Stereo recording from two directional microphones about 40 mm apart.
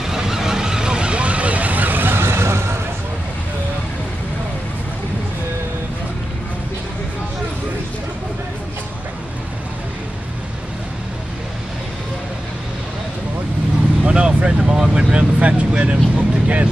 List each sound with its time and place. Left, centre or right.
0.0 s vehicle: centre; by 2.5 s right
14.0 s a sound: right
15.1 s vehicle: right